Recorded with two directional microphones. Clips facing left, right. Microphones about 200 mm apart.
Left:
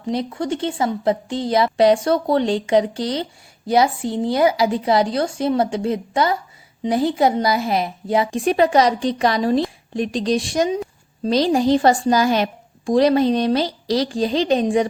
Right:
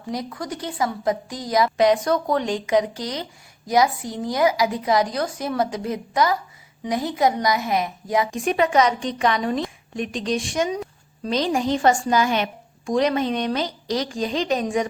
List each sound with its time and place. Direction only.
0.1 s a woman's voice: 25° left (ahead or behind)